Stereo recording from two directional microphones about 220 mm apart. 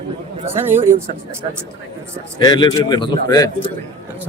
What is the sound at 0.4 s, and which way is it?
Speech, 10° right (ahead or behind).